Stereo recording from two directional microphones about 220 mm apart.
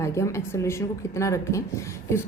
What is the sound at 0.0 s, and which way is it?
A woman's voice, 15° left (ahead or behind).